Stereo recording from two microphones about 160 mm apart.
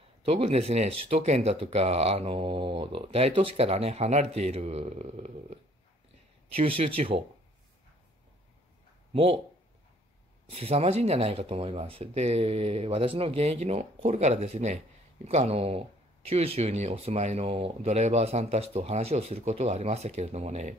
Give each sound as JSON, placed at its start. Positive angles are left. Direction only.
{"t": 0.2, "sound": "speech", "side_deg": -40}
{"t": 9.1, "sound": "speech", "side_deg": -35}
{"t": 10.5, "sound": "speech", "side_deg": -40}